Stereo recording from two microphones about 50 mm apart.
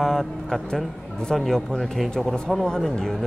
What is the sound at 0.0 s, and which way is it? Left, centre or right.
A man's voice, centre.